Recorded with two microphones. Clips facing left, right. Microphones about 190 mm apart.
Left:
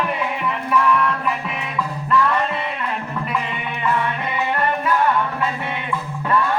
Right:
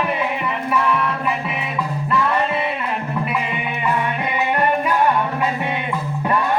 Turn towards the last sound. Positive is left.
turn(degrees=-15)  # may be behind; listen again after turning